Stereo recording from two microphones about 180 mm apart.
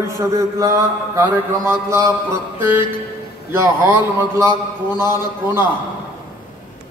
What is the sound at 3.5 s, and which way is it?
A man's voice, 10° right (ahead or behind).